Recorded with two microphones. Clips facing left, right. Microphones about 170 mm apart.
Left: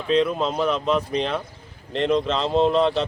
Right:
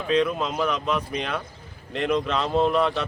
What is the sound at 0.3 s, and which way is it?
Speech, 30° left (ahead or behind).